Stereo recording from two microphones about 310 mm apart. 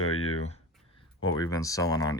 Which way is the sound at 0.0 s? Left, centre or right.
Left.